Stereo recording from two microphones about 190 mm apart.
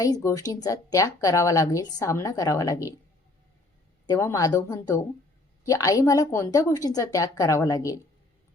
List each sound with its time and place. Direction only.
0.0 s a woman's voice: 15° left (ahead or behind)
4.0 s a woman's voice: 15° left (ahead or behind)